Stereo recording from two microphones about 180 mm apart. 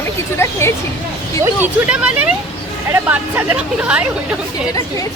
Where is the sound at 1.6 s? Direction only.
5° right (ahead or behind).